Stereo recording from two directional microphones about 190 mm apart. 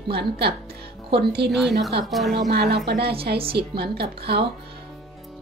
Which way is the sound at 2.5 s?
60° right (ahead or behind).